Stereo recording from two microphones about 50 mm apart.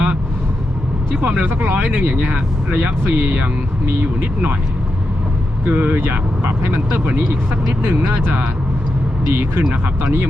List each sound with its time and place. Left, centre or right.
1.2 s speech: right
1.5 s speech: right
2.1 s speech: centre
2.7 s speech: right
5.6 s speech: right
7.9 s speech: right
9.3 s speech: right